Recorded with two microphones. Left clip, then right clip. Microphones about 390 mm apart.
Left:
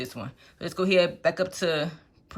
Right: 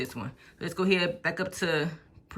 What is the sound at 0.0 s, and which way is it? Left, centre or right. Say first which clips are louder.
Speech: even; centre.